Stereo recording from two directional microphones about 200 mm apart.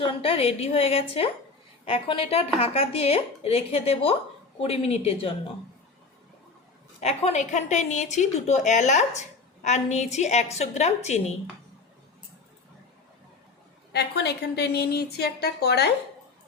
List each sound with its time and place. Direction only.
0.0 s a woman's voice: 30° left (ahead or behind)
7.0 s a woman's voice: 30° left (ahead or behind)
13.9 s a woman's voice: 55° left (ahead or behind)